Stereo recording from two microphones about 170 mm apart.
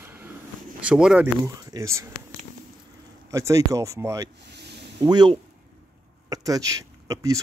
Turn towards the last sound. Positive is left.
turn(degrees=-20)  # may be behind; listen again after turning